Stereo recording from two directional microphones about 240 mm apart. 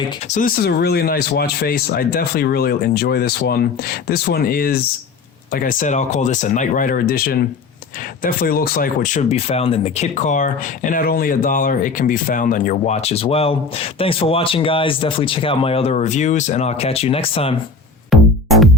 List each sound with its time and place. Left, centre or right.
0.3 s speech: left
18.1 s music: centre